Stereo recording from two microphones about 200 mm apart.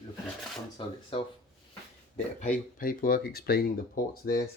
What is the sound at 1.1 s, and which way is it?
Speech, 25° left (ahead or behind).